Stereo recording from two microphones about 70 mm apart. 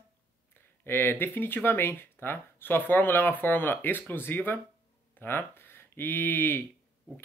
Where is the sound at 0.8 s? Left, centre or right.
Left.